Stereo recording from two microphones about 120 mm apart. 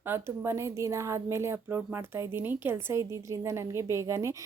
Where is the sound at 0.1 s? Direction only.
20° right (ahead or behind).